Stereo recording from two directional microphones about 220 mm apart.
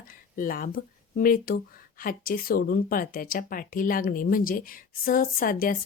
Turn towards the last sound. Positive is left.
turn(degrees=40)  # may be behind; listen again after turning